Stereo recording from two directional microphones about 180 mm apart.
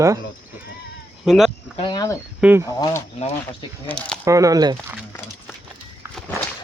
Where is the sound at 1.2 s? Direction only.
Centre (ahead or behind).